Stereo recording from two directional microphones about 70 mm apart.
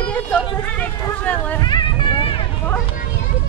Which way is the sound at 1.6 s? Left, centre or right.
Left.